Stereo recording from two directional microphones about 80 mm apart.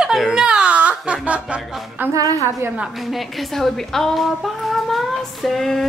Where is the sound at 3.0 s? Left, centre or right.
Centre.